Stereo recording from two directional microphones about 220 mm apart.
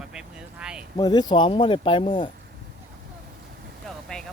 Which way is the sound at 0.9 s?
20° left (ahead or behind).